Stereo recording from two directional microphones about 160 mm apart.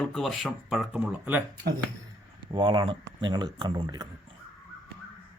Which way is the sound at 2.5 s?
30° right (ahead or behind).